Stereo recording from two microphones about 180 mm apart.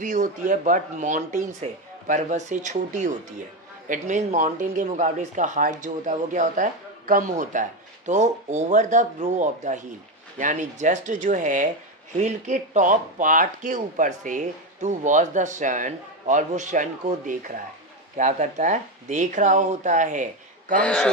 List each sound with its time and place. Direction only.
0.0 s speech: 40° right (ahead or behind)
20.8 s speech: 5° left (ahead or behind)